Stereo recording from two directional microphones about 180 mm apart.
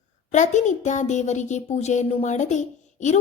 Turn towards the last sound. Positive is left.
turn(degrees=40)  # may be behind; listen again after turning